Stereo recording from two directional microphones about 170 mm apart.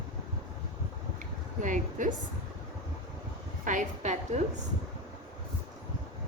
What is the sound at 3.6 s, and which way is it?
Speech, 50° right (ahead or behind).